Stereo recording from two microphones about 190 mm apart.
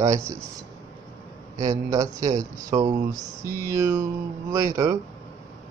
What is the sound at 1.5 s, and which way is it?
Speech, 15° right (ahead or behind).